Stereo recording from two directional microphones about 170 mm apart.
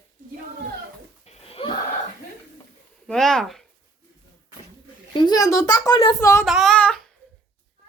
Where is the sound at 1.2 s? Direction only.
35° left (ahead or behind).